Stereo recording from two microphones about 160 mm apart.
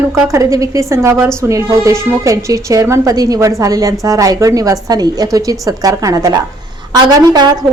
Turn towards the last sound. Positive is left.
turn(degrees=-25)  # may be behind; listen again after turning